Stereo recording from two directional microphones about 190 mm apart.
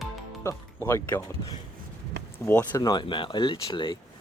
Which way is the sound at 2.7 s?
20° left (ahead or behind).